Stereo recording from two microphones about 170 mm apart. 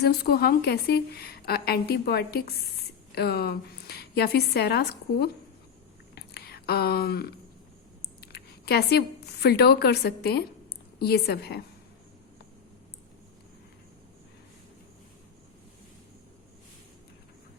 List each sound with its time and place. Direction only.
0.0 s a woman's voice: 65° left (ahead or behind)
6.1 s whispering: 70° left (ahead or behind)
8.2 s a woman's voice: 70° left (ahead or behind)